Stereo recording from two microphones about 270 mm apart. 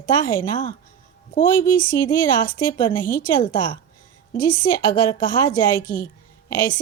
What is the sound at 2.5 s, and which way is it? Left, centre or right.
A woman's voice, centre.